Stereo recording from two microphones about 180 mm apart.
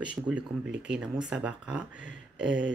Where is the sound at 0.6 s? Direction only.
75° right (ahead or behind).